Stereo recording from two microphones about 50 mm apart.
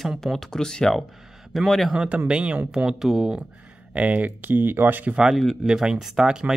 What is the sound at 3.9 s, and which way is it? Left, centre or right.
Speech, right.